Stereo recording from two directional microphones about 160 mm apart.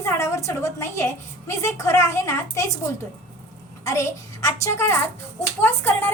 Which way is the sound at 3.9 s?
20° left (ahead or behind).